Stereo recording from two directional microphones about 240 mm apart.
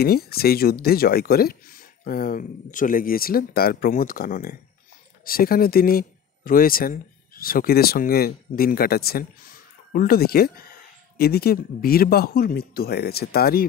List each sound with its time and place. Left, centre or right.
0.0 s speech: left